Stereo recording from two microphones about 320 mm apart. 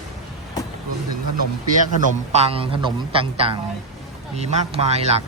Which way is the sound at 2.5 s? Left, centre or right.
Centre.